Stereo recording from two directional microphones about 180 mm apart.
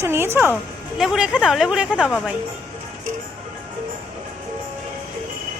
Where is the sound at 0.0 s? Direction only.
15° right (ahead or behind).